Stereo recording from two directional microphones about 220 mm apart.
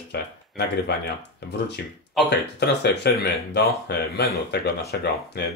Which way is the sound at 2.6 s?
50° left (ahead or behind).